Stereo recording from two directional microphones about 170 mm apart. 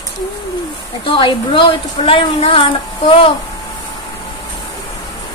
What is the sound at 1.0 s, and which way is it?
A woman's voice, 30° left (ahead or behind).